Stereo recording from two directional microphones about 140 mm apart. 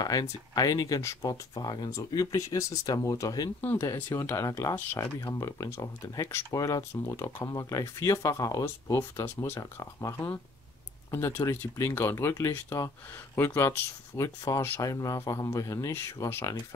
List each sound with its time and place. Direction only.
0.0 s speech: 25° left (ahead or behind)